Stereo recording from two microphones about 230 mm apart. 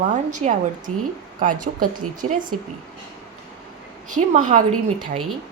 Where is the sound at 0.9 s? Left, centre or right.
Right.